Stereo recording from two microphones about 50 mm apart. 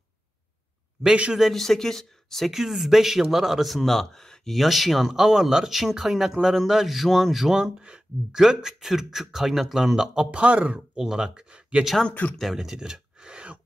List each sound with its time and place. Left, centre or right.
1.0 s speech: centre
1.4 s speech: centre
2.5 s a man's voice: centre
4.6 s a man's voice: centre
7.5 s speech: centre
10.3 s speech: right
11.0 s speech: centre
12.1 s speech: left
12.5 s a sound: centre